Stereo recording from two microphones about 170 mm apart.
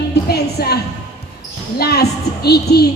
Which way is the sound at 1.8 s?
70° left (ahead or behind).